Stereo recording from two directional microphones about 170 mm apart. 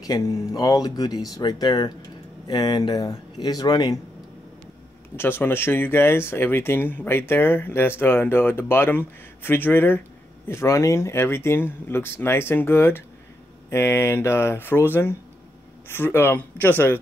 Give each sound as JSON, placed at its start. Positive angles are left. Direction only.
{"t": 0.0, "sound": "speech", "side_deg": 20}
{"t": 5.1, "sound": "speech", "side_deg": 15}